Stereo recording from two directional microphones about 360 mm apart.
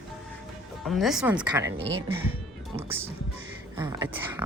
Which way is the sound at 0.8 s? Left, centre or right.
Centre.